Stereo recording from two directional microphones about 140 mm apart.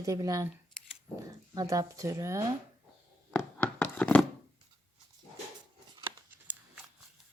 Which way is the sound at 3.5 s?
10° left (ahead or behind).